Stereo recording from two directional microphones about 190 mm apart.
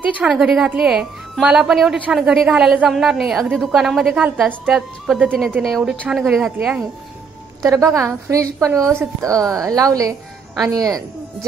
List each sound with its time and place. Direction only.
0.2 s a woman's voice: centre (ahead or behind)
7.6 s a woman's voice: 15° right (ahead or behind)